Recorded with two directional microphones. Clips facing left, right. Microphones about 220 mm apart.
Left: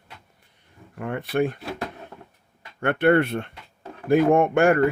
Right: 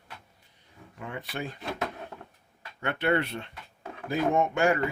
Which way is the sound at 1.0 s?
55° left (ahead or behind).